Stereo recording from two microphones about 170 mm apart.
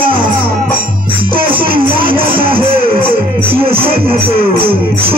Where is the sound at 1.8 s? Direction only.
30° right (ahead or behind).